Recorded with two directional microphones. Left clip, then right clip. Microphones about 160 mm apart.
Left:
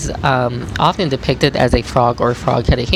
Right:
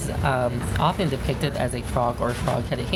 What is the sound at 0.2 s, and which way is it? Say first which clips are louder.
Speech: left 8 dB; 30° left (ahead or behind).